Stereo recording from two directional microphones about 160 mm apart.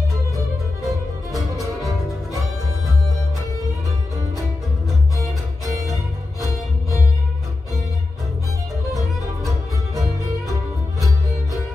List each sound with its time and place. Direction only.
0.8 s music: centre (ahead or behind)
6.4 s music: 20° left (ahead or behind)